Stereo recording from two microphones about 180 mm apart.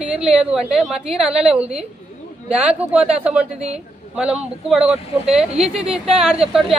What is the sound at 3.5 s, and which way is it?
Speech, 35° right (ahead or behind).